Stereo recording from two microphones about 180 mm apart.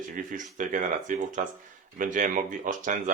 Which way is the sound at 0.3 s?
45° right (ahead or behind).